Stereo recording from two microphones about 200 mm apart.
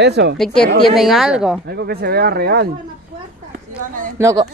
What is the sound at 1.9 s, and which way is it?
Speech, 50° right (ahead or behind).